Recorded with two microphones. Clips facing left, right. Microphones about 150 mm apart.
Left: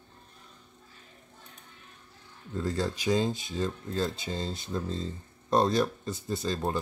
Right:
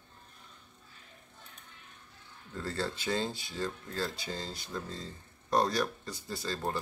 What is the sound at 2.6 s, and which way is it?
Speech, 15° left (ahead or behind).